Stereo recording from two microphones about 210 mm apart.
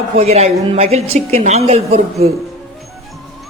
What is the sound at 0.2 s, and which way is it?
A woman's voice, 30° right (ahead or behind).